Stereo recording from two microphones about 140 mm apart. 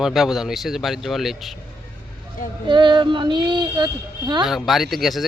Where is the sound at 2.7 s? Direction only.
35° right (ahead or behind).